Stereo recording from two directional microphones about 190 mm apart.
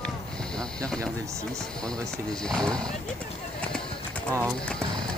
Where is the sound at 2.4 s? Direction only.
5° left (ahead or behind).